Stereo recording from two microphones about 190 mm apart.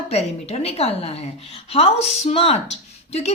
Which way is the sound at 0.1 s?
35° left (ahead or behind).